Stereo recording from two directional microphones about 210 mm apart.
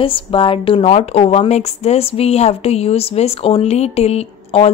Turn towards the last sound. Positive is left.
turn(degrees=30)  # may be behind; listen again after turning